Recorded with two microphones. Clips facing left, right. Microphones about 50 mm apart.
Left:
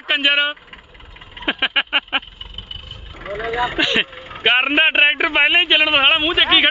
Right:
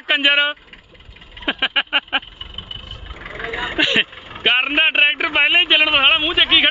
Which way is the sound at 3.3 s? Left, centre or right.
Centre.